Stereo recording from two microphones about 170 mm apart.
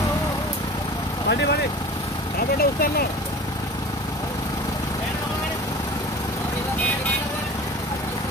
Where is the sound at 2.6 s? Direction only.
65° left (ahead or behind).